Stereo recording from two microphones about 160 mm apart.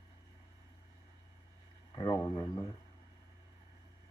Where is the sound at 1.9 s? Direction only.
25° left (ahead or behind).